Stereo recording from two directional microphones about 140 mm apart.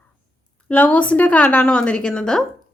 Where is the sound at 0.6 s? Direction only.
10° left (ahead or behind).